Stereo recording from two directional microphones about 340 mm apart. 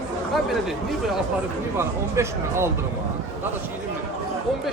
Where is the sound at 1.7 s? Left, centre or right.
Centre.